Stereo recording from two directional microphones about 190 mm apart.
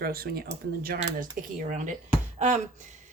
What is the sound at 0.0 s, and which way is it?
Speech, 50° right (ahead or behind).